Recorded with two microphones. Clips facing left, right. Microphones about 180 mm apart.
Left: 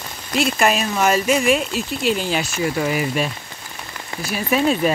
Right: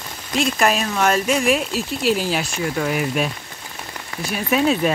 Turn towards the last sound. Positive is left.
turn(degrees=0)  # may be behind; listen again after turning